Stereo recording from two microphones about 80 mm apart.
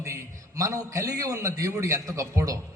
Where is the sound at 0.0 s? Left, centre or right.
Right.